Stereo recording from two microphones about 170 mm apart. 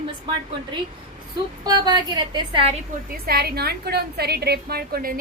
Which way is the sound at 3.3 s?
65° right (ahead or behind).